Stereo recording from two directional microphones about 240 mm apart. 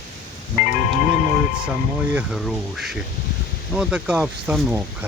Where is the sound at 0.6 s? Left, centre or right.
Left.